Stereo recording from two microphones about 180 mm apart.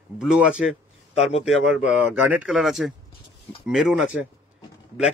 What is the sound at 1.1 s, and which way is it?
Speech, 35° left (ahead or behind).